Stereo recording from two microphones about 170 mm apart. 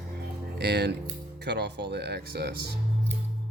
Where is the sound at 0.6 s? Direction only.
80° right.